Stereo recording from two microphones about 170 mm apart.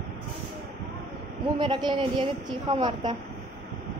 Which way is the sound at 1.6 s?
25° right (ahead or behind).